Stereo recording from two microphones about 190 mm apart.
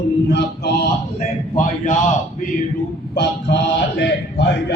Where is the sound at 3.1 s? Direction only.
65° left (ahead or behind).